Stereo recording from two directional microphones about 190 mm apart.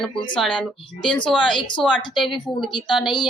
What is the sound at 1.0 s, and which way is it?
Speech, 25° left (ahead or behind).